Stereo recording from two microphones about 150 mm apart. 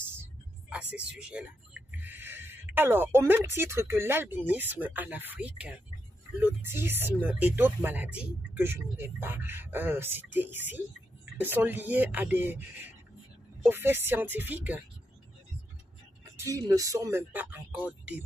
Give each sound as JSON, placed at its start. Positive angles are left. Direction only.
{"t": 0.1, "sound": "speech", "side_deg": -10}
{"t": 16.3, "sound": "speech", "side_deg": -20}